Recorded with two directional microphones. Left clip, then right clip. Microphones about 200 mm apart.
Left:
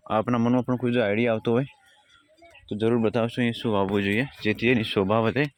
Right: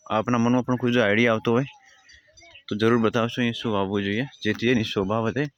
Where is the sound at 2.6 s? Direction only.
15° right (ahead or behind).